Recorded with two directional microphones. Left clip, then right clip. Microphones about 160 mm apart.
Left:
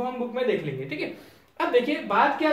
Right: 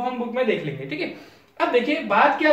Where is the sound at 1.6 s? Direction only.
20° left (ahead or behind).